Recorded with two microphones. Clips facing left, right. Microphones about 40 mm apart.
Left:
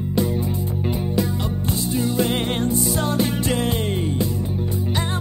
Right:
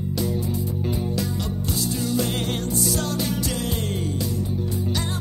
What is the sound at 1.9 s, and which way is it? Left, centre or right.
Music, left.